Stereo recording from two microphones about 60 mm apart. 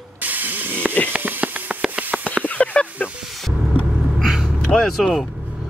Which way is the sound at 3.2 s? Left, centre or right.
Centre.